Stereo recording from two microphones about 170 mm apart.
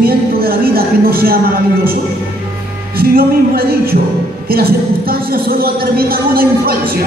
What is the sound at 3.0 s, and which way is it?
A woman's voice, 60° right (ahead or behind).